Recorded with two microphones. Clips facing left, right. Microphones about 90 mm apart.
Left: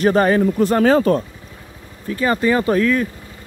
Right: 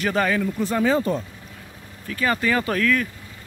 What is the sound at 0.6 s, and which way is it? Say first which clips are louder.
Speech: left 7 dB; 65° left (ahead or behind).